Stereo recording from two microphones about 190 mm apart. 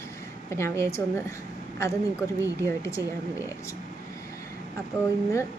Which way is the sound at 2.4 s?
15° left (ahead or behind).